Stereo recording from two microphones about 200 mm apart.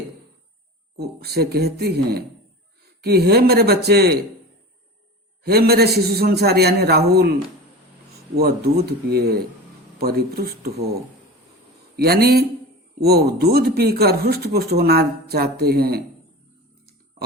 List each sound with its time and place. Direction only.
0.9 s speech: 50° right (ahead or behind)
5.4 s speech: 50° right (ahead or behind)
8.4 s speech: 50° right (ahead or behind)
11.9 s speech: 50° right (ahead or behind)